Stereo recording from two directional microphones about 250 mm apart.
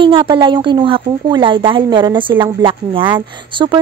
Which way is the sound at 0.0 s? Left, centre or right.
Centre.